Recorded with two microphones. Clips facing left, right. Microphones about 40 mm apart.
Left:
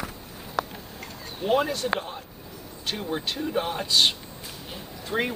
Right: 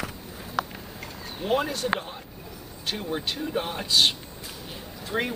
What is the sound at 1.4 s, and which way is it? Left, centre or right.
Speech, centre.